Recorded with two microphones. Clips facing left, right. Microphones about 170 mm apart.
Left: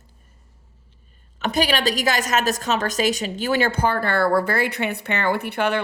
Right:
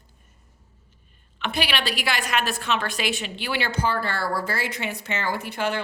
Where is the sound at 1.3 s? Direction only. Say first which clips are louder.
Left 6 dB; 40° left (ahead or behind).